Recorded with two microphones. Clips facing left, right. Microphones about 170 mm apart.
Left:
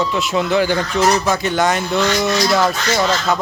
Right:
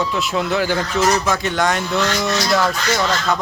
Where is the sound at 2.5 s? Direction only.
15° left (ahead or behind).